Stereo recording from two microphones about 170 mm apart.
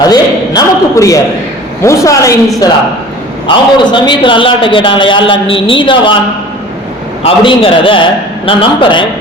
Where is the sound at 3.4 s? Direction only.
25° left (ahead or behind).